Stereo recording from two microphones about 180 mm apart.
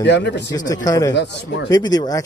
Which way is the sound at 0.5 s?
20° left (ahead or behind).